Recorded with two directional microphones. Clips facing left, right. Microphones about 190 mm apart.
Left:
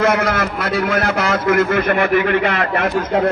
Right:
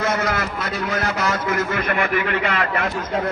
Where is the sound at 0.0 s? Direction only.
60° left (ahead or behind); by 2.8 s 40° left (ahead or behind).